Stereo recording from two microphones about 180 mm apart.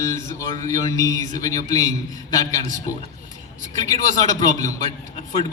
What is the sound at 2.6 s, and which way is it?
Speech, 40° right (ahead or behind).